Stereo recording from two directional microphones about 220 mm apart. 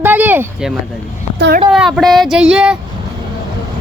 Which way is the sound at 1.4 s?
55° right (ahead or behind).